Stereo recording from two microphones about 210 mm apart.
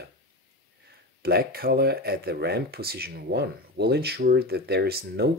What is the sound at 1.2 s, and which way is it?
Speech, 45° right (ahead or behind).